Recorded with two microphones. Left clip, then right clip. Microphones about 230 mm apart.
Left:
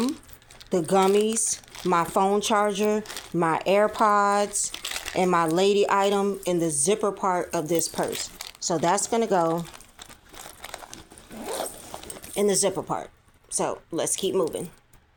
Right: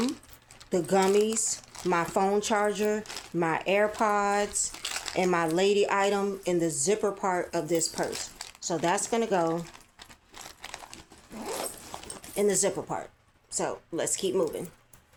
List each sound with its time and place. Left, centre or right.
0.7 s speech: left
4.7 s crumpling: centre
5.1 s speech: left
7.9 s speech: centre
8.6 s speech: left
10.0 s a sound: centre
12.3 s speech: left